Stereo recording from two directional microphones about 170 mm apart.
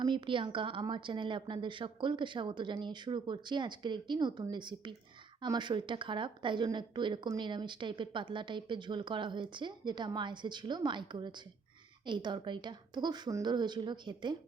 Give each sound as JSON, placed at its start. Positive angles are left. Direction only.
{"t": 0.0, "sound": "a woman's voice", "side_deg": -30}